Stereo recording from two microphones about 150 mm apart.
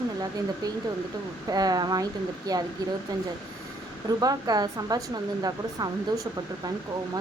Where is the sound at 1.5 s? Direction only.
25° right (ahead or behind).